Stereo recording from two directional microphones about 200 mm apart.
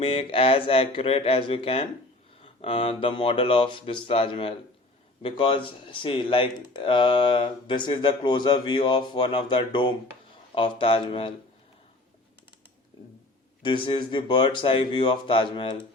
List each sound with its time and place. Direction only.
0.0 s speech: 30° left (ahead or behind)
13.6 s speech: 25° left (ahead or behind)